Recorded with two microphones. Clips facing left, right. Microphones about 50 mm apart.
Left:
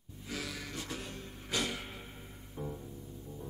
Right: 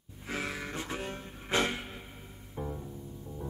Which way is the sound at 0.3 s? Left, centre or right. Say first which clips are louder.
Right 5 dB; right.